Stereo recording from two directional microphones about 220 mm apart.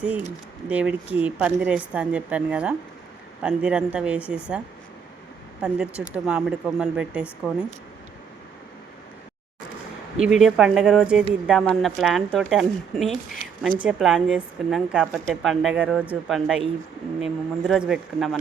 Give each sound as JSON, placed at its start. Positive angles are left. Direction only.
{"t": 0.7, "sound": "a woman's voice", "side_deg": -5}
{"t": 10.2, "sound": "a woman's voice", "side_deg": 0}